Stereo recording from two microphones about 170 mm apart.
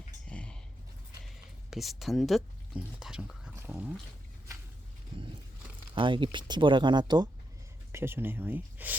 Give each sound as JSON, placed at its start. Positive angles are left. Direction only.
{"t": 0.3, "sound": "a sound", "side_deg": 5}
{"t": 1.7, "sound": "speech", "side_deg": 0}
{"t": 5.9, "sound": "speech", "side_deg": -30}
{"t": 7.9, "sound": "speech", "side_deg": -15}